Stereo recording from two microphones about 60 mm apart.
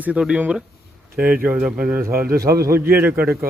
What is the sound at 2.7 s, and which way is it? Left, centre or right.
Speech, right.